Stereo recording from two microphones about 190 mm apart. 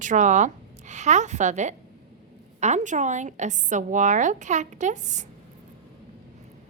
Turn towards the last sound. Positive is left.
turn(degrees=-40)  # may be behind; listen again after turning